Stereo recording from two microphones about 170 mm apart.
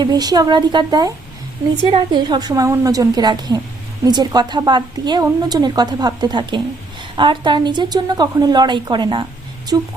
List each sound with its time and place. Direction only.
0.0 s a woman's voice: 25° right (ahead or behind)
9.7 s speech: 15° right (ahead or behind)